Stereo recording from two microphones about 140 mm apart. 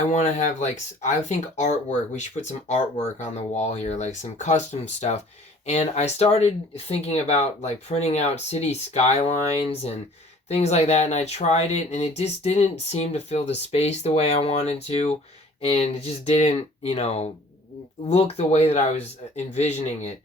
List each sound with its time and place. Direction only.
0.1 s speech: 60° left (ahead or behind)